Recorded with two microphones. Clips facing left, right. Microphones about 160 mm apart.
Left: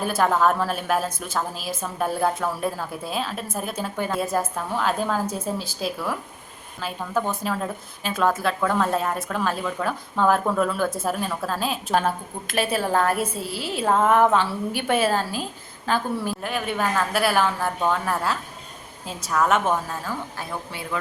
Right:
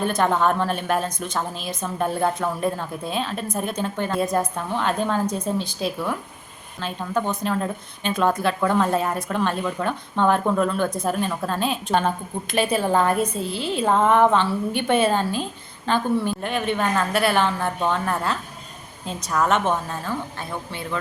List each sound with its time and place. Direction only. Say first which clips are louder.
0.0 s a woman's voice: even; 5° left (ahead or behind)